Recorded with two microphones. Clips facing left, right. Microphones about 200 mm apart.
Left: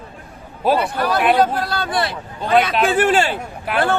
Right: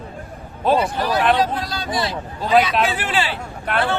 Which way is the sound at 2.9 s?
50° left (ahead or behind).